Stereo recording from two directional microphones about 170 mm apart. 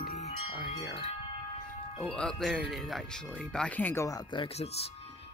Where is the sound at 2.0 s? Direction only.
5° left (ahead or behind).